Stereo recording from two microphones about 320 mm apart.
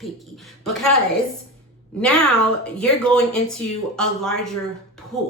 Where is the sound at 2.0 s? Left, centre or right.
Centre.